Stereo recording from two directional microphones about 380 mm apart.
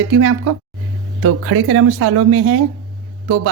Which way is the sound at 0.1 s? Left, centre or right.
Right.